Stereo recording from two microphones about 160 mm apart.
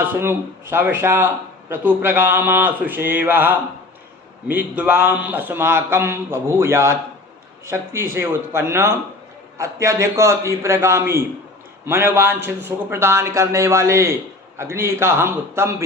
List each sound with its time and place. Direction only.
0.0 s speech: 15° right (ahead or behind)